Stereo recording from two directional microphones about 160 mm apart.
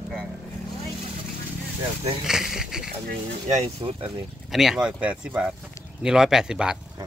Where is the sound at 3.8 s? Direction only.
30° right (ahead or behind).